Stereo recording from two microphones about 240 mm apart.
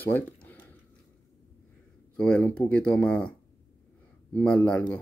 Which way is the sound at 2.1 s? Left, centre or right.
Centre.